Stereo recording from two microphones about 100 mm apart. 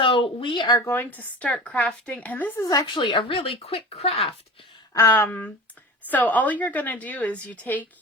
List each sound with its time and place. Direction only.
0.0 s speech: 60° left (ahead or behind)
0.9 s a woman's voice: 20° left (ahead or behind)
2.6 s a woman's voice: 35° left (ahead or behind)
2.8 s speech: 55° left (ahead or behind); by 4.4 s 85° left
4.9 s a woman's voice: 30° left (ahead or behind)